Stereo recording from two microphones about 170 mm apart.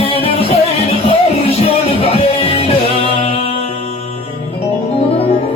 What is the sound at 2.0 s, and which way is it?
Music, 35° left (ahead or behind).